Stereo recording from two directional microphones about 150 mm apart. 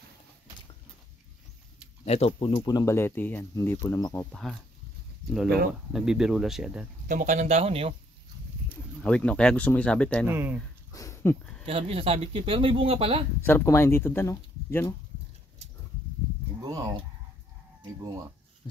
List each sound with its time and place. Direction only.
2.0 s speech: 45° left (ahead or behind)
2.5 s speech: 30° left (ahead or behind)
4.3 s speech: centre (ahead or behind)
5.9 s speech: 5° right (ahead or behind)
7.1 s speech: 55° right (ahead or behind)
9.0 s speech: 5° left (ahead or behind)
10.2 s speech: 15° right (ahead or behind)
10.9 s dog: 20° left (ahead or behind)
11.6 s speech: 40° right (ahead or behind)
13.4 s speech: 15° left (ahead or behind)
16.6 s chicken: 25° right (ahead or behind)